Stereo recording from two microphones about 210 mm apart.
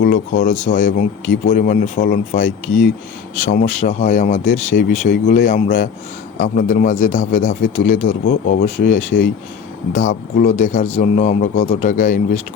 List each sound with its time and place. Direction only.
0.0 s speech: 40° left (ahead or behind)